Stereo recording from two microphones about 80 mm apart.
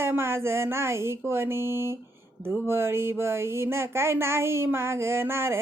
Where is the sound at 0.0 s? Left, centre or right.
Right.